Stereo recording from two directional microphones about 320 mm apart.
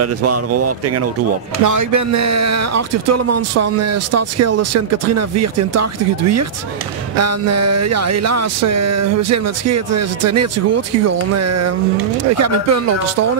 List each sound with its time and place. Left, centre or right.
0.0 s speech: right
1.6 s speech: right